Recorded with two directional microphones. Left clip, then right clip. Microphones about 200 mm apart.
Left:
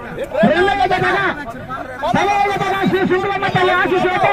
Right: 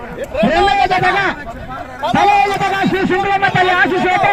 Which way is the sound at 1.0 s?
50° right (ahead or behind).